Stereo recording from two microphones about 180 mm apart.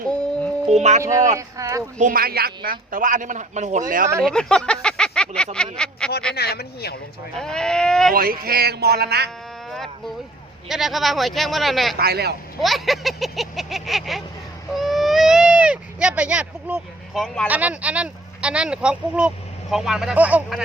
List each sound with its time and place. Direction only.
0.8 s speech: 40° right (ahead or behind)
1.4 s speech: 15° right (ahead or behind)
2.0 s a man's voice: 50° right (ahead or behind)
4.2 s speech: 5° left (ahead or behind)
6.3 s speech: 60° left (ahead or behind)
7.3 s speech: 5° left (ahead or behind)
8.1 s music: 55° right (ahead or behind)
9.6 s speech: centre (ahead or behind)
11.9 s music: 60° right (ahead or behind)
12.6 s speech: centre (ahead or behind)
17.2 s speech: 5° left (ahead or behind)
17.5 s speech: 10° right (ahead or behind)